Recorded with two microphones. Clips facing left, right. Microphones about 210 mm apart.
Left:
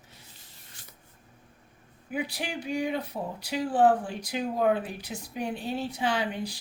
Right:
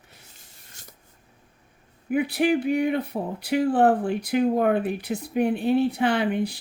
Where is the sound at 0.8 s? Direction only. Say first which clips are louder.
Right 6 dB; 45° right (ahead or behind).